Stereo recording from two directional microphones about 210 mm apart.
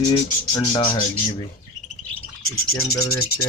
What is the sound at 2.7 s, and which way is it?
Rub, 15° left (ahead or behind).